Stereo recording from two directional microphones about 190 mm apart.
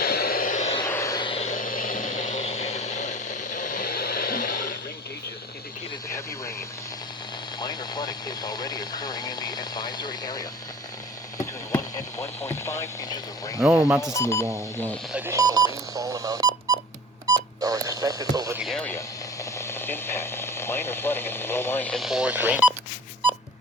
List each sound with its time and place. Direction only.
0.0 s a sound: 55° left (ahead or behind)
0.8 s vehicle: 15° left (ahead or behind); by 4.7 s 50° left (ahead or behind)
6.1 s radio: 15° left (ahead or behind)
7.6 s speech: 20° left (ahead or behind)
13.6 s speech: 10° right (ahead or behind)
14.1 s speech: 15° left (ahead or behind)
15.1 s telephone dialing: 10° right (ahead or behind)
18.6 s speech: 5° left (ahead or behind)